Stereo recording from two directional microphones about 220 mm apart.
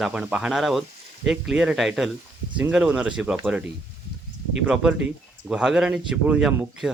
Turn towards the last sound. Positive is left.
turn(degrees=-5)  # may be behind; listen again after turning